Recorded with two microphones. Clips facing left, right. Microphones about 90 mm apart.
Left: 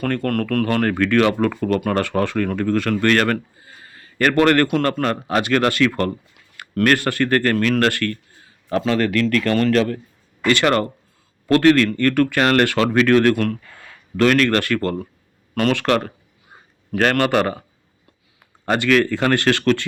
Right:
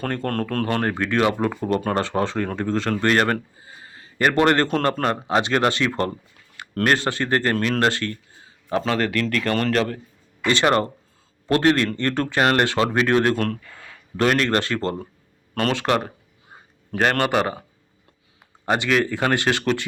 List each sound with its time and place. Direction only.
0.0 s a man's voice: 25° right (ahead or behind)